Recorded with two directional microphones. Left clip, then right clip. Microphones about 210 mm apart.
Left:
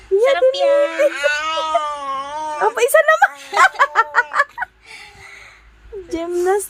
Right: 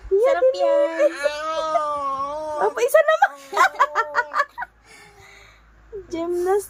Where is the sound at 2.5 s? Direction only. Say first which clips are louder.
Left 3 dB; 30° left (ahead or behind).